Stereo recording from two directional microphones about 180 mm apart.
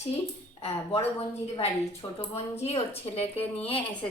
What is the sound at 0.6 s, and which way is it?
Speech, 30° left (ahead or behind).